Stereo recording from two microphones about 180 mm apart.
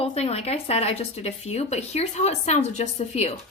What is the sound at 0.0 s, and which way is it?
A woman's voice, 35° left (ahead or behind).